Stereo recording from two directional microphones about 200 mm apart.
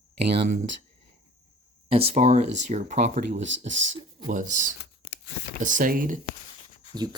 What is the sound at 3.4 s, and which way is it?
Speech, 65° right (ahead or behind).